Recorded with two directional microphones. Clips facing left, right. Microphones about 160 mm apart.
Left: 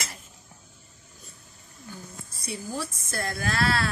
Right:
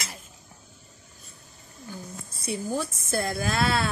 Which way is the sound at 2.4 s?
25° right (ahead or behind).